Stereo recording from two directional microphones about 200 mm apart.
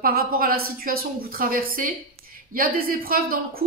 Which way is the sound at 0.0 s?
50° right (ahead or behind).